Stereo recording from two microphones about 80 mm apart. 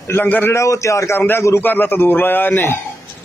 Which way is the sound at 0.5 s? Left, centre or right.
Left.